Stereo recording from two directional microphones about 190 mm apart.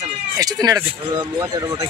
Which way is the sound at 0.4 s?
20° right (ahead or behind).